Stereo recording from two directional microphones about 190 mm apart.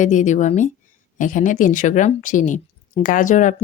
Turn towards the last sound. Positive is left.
turn(degrees=40)  # may be behind; listen again after turning